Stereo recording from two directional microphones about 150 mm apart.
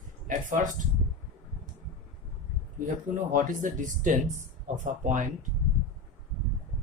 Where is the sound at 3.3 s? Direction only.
60° right (ahead or behind).